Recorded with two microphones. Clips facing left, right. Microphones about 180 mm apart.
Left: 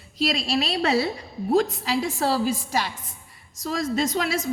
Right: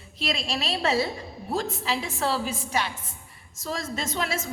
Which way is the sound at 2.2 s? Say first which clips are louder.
Left 4 dB; 40° left (ahead or behind).